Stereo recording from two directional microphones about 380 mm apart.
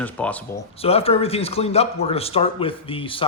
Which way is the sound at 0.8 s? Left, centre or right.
Centre.